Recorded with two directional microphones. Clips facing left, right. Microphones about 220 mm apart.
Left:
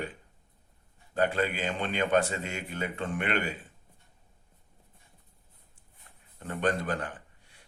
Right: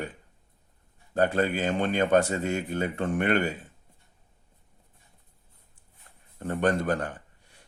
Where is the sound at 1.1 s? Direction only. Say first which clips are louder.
Right 4 dB; 45° right (ahead or behind).